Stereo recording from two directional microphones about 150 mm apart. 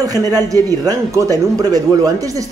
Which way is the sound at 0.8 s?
25° right (ahead or behind).